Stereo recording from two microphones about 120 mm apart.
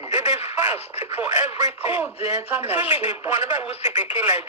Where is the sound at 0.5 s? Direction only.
20° right (ahead or behind).